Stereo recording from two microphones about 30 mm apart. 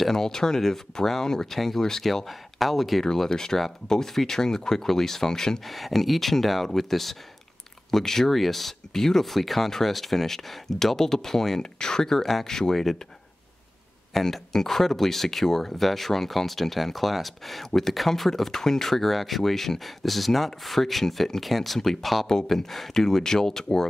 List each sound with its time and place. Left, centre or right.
0.1 s speech: centre
2.0 s speech: centre
3.3 s speech: centre
5.6 s speech: centre
11.6 s speech: left
12.2 s speech: centre
14.1 s speech: centre
23.2 s speech: centre